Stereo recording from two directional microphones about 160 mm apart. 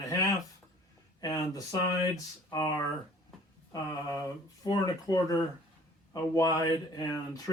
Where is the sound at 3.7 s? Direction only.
20° left (ahead or behind).